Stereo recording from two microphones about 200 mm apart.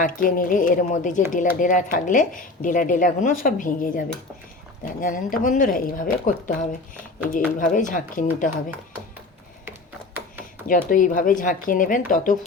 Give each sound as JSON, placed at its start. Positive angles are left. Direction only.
{"t": 0.0, "sound": "a woman's voice", "side_deg": 40}
{"t": 10.7, "sound": "speech", "side_deg": 40}